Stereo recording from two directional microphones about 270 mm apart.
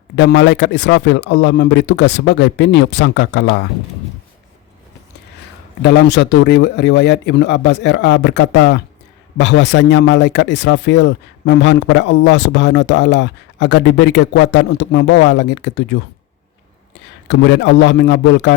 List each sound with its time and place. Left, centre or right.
0.2 s speech: left
5.8 s speech: left
17.2 s a man's voice: left